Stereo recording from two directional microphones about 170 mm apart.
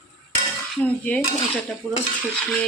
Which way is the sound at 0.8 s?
10° left (ahead or behind).